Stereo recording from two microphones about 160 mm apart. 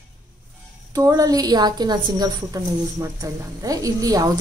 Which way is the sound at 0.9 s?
20° right (ahead or behind).